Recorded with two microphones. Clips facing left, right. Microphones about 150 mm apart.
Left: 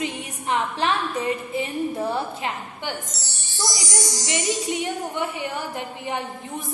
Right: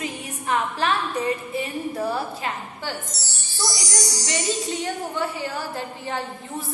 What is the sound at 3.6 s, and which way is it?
A woman's voice, 20° left (ahead or behind).